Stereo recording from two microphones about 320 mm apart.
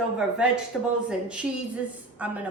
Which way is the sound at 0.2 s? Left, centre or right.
Centre.